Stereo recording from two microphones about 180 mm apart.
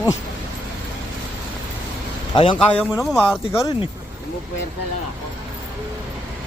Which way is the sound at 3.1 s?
10° left (ahead or behind).